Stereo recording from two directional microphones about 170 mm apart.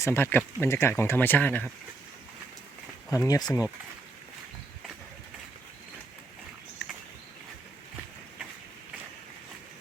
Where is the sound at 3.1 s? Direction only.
20° left (ahead or behind).